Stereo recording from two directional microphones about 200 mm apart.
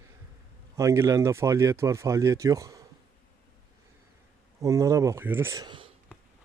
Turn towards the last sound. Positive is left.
turn(degrees=-25)  # may be behind; listen again after turning